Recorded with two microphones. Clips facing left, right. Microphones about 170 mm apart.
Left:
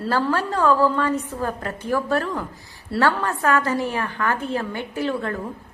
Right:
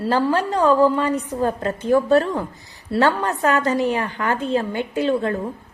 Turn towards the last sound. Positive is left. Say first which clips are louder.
# right 5 dB
turn(degrees=-20)  # may be behind; listen again after turning